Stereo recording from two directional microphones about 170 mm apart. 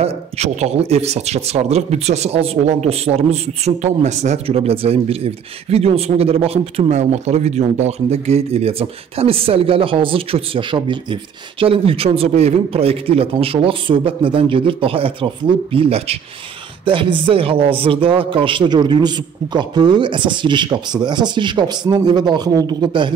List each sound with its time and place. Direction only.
0.0 s a man's voice: 40° right (ahead or behind)